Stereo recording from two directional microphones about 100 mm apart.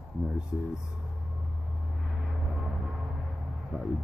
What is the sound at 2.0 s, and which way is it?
Vehicle, centre (ahead or behind).